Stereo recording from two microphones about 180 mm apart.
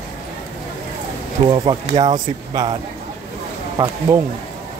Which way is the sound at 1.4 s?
25° right (ahead or behind).